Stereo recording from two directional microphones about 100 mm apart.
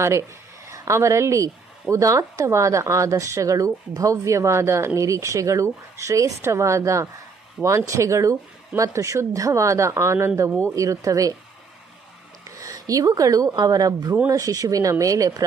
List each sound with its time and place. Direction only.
0.0 s speech: 30° right (ahead or behind)
12.4 s a sound: 35° right (ahead or behind)
13.6 s speech: 35° right (ahead or behind)